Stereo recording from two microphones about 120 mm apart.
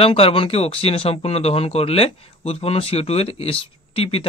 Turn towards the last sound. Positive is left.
turn(degrees=50)  # may be behind; listen again after turning